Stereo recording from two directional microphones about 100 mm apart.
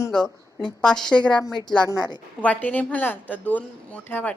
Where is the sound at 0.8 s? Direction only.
5° left (ahead or behind).